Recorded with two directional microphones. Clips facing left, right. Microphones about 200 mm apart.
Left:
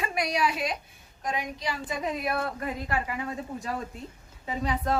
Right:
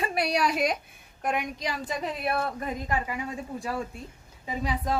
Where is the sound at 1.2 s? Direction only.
60° right (ahead or behind).